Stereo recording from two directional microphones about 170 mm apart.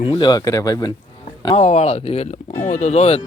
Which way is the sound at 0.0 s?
30° left (ahead or behind).